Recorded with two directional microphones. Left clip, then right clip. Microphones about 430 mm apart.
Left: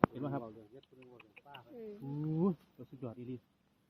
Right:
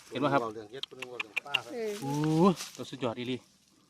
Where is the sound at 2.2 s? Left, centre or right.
Centre.